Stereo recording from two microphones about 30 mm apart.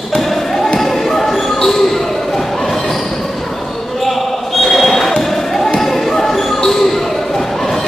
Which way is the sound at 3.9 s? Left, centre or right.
Centre.